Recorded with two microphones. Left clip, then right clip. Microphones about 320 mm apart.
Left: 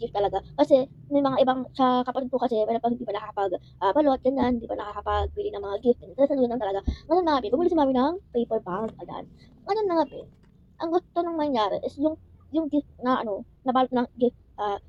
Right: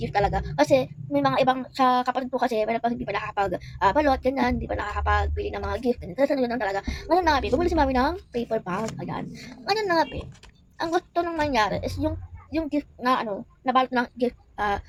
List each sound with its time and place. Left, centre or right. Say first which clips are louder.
0.0 s a woman's voice: right 2 dB; centre